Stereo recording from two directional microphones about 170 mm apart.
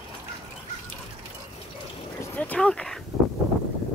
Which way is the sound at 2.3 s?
10° left (ahead or behind).